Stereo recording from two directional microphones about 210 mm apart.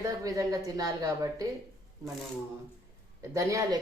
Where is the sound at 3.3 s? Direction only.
15° right (ahead or behind).